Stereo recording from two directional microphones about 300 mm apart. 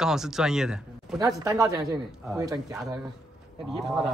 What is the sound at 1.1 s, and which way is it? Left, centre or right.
A woman's voice, centre.